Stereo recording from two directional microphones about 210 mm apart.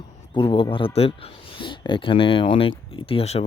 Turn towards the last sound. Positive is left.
turn(degrees=30)  # may be behind; listen again after turning